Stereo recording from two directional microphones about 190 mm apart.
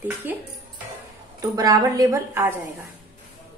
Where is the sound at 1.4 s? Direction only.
20° right (ahead or behind).